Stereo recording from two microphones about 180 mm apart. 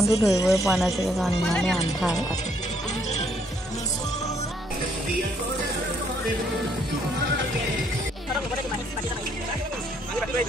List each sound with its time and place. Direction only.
0.0 s speech: 15° left (ahead or behind)
0.7 s speech: centre (ahead or behind)